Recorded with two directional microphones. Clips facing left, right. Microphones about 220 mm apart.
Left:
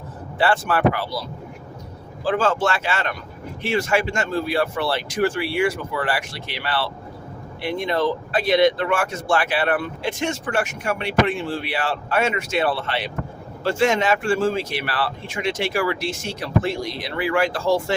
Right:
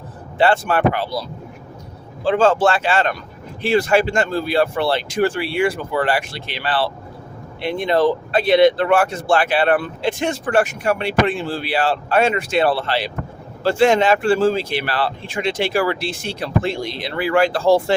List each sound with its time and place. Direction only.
0.3 s speech: 25° right (ahead or behind)
2.2 s speech: 25° right (ahead or behind)